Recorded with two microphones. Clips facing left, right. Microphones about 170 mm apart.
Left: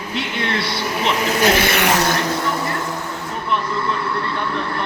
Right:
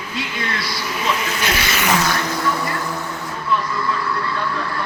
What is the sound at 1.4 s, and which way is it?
Speech, 50° left (ahead or behind).